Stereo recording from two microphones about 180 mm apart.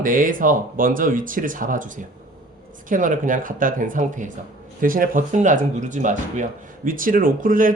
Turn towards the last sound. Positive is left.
turn(degrees=-50)  # may be behind; listen again after turning